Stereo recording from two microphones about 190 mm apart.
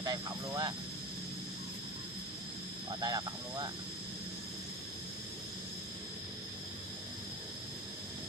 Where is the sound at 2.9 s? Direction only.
20° right (ahead or behind).